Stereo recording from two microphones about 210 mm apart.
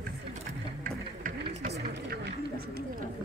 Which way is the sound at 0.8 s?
40° right (ahead or behind).